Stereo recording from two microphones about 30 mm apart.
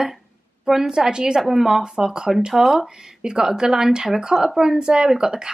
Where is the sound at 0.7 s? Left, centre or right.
Centre.